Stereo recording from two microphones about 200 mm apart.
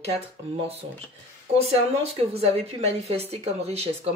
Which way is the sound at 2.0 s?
30° right (ahead or behind).